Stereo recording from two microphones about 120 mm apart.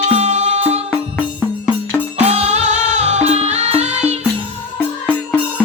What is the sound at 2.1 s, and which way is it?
Music, 65° right (ahead or behind).